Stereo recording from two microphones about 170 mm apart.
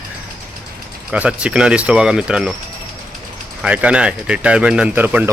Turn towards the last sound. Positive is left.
turn(degrees=-10)  # may be behind; listen again after turning